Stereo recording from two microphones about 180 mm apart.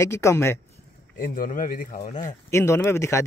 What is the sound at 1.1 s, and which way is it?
Speech, 55° left (ahead or behind).